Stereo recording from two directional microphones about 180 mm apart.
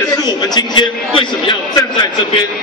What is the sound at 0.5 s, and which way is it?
A man's voice, 25° left (ahead or behind).